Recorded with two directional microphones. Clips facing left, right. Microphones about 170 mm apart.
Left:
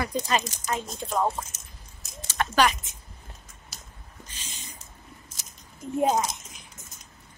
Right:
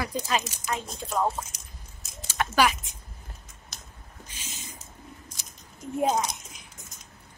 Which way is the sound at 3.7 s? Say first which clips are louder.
Right 1 dB; 5° left (ahead or behind).